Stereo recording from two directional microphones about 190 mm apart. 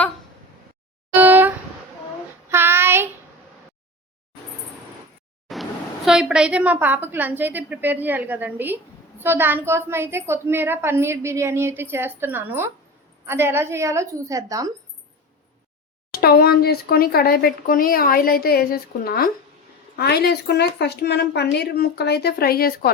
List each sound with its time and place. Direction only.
1.2 s a sound: 10° right (ahead or behind)
2.5 s child singing: 10° right (ahead or behind)
5.5 s vehicle: centre (ahead or behind)
6.1 s a woman's voice: 5° right (ahead or behind)
16.1 s a woman's voice: 55° left (ahead or behind)